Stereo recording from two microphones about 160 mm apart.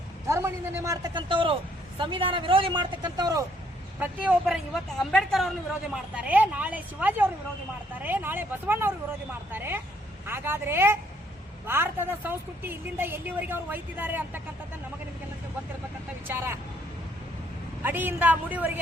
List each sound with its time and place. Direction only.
0.3 s a man's voice: 15° right (ahead or behind)
4.0 s a woman's voice: 5° right (ahead or behind)
16.2 s a woman's voice: 15° right (ahead or behind)
17.8 s a woman's voice: 10° right (ahead or behind)